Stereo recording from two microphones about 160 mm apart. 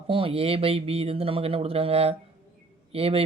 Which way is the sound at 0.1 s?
35° right (ahead or behind).